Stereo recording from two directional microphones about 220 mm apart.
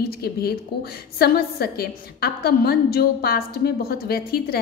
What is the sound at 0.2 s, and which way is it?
A woman's voice, 45° left (ahead or behind).